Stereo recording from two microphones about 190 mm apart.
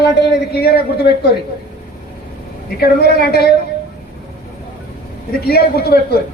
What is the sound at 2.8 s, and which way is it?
Speech, 55° left (ahead or behind).